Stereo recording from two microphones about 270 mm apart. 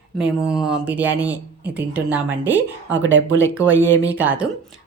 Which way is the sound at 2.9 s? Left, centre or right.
Right.